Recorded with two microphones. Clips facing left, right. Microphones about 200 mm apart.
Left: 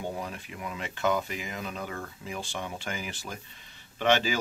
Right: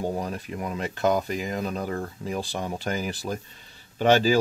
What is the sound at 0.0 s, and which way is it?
Speech, 40° right (ahead or behind).